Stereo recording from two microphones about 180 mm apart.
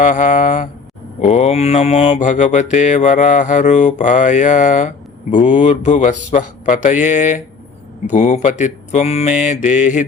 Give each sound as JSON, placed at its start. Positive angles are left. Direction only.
{"t": 0.0, "sound": "mantra", "side_deg": 45}
{"t": 8.1, "sound": "speech", "side_deg": 40}